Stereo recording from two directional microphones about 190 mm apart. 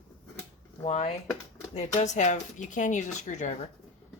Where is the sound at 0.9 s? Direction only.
35° left (ahead or behind).